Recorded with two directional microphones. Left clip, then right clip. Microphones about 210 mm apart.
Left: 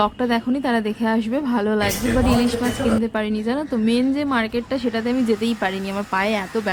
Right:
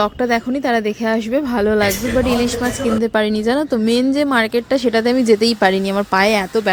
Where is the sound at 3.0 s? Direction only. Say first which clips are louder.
Right 7 dB; 35° right (ahead or behind).